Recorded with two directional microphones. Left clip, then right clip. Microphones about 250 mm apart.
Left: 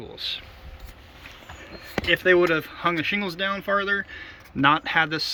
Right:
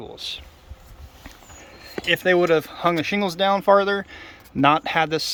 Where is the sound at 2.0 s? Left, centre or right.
Centre.